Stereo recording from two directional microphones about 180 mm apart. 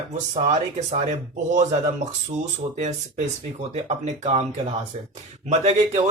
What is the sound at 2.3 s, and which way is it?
Speech, 35° right (ahead or behind).